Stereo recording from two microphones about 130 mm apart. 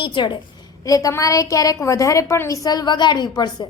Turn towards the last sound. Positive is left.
turn(degrees=30)  # may be behind; listen again after turning